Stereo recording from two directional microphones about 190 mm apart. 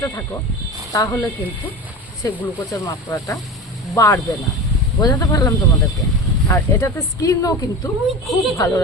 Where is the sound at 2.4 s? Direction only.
15° left (ahead or behind).